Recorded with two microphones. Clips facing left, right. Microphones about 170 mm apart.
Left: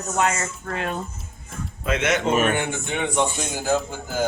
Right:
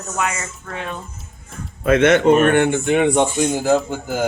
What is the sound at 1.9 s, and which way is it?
Speech, 55° right (ahead or behind).